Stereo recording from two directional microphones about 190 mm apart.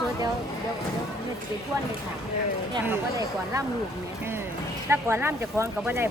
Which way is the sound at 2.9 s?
15° right (ahead or behind).